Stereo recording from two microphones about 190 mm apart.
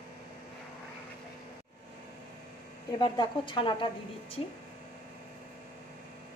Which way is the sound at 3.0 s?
25° left (ahead or behind).